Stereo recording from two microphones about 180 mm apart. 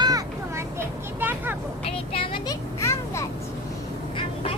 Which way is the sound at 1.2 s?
10° right (ahead or behind).